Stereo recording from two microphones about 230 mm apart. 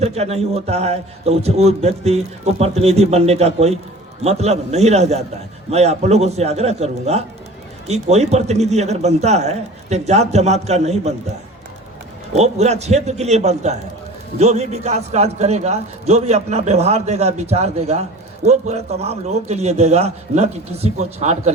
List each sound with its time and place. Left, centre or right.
0.0 s a man's voice: right
12.3 s a man's voice: right